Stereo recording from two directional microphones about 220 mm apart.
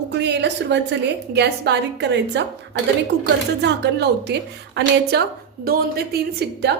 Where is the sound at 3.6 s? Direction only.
50° right (ahead or behind).